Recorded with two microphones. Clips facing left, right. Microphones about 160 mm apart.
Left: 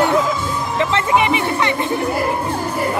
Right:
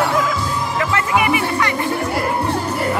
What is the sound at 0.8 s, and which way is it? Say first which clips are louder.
Music: left 3 dB; 25° left (ahead or behind).